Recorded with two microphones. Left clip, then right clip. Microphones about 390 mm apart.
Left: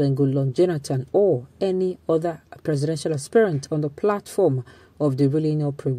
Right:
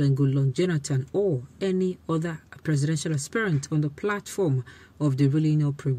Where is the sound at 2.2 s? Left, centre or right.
Centre.